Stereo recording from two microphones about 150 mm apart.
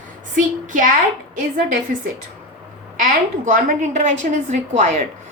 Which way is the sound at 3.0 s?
60° right (ahead or behind).